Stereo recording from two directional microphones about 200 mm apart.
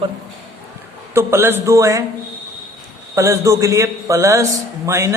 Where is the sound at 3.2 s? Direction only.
15° right (ahead or behind).